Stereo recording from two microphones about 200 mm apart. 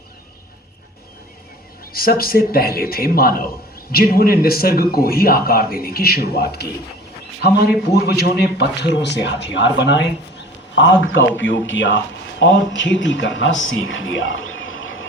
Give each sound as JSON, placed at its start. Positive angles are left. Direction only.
{"t": 1.9, "sound": "a man's voice", "side_deg": 50}
{"t": 10.8, "sound": "speech", "side_deg": 70}